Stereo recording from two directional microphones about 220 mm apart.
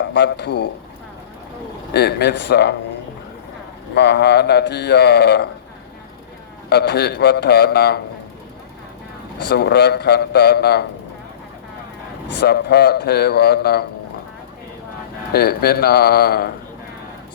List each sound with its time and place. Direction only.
0.1 s mantra: 50° left (ahead or behind)
1.9 s mantra: 50° left (ahead or behind)
3.9 s mantra: 50° left (ahead or behind)
6.7 s mantra: 50° left (ahead or behind)
9.4 s mantra: 50° left (ahead or behind)
12.3 s mantra: 50° left (ahead or behind)
15.3 s mantra: 45° left (ahead or behind)